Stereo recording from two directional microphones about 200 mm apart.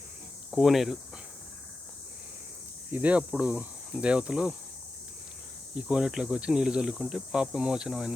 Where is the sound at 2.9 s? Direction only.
5° right (ahead or behind).